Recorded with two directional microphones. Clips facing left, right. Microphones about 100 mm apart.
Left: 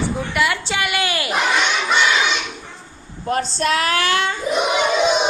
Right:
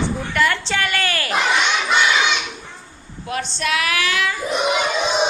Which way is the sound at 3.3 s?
40° left (ahead or behind).